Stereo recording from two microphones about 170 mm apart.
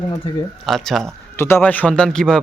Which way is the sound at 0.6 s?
Centre (ahead or behind).